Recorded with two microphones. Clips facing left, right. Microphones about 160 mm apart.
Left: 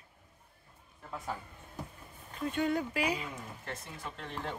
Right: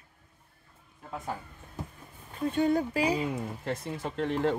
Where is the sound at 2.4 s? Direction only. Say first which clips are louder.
Right 5 dB; 30° right (ahead or behind).